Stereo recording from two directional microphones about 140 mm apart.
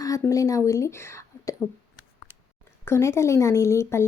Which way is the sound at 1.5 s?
25° left (ahead or behind).